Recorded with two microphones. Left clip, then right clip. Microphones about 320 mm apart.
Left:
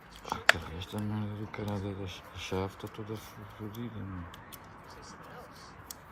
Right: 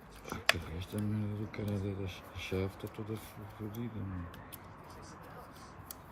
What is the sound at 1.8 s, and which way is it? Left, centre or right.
Speech, left.